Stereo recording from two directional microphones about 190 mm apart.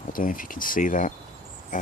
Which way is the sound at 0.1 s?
45° left (ahead or behind).